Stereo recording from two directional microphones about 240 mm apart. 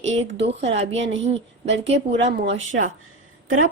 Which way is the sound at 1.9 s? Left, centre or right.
Right.